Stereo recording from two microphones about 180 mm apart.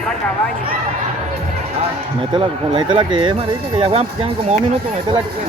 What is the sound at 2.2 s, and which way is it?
Speech, 30° right (ahead or behind).